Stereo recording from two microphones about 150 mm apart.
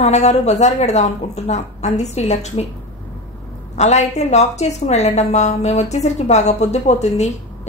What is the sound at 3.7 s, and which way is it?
Speech, 50° left (ahead or behind).